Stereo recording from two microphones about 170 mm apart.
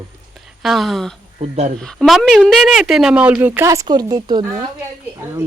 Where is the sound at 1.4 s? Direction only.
40° right (ahead or behind).